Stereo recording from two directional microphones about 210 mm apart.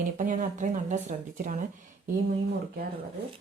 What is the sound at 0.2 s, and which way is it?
A woman's voice, 40° right (ahead or behind).